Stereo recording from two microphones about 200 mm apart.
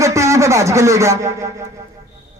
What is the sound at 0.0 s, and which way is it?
Speech, 15° right (ahead or behind).